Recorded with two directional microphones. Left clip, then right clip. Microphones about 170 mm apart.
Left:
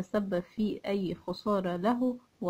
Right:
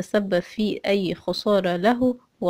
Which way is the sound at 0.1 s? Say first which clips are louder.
Right 10 dB; 25° right (ahead or behind).